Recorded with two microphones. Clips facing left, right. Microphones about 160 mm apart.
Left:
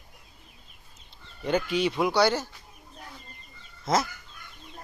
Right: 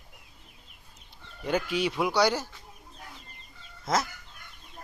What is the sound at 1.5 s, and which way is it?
Speech, 5° right (ahead or behind).